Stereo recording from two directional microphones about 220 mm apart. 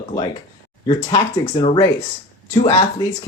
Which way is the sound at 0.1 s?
15° left (ahead or behind).